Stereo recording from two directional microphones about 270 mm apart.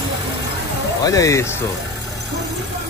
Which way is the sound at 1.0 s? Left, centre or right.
Centre.